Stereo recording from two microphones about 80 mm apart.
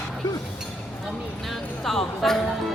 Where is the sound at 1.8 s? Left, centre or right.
Centre.